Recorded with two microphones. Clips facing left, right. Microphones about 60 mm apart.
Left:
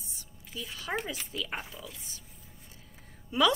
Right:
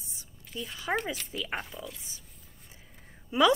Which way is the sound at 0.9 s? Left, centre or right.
Centre.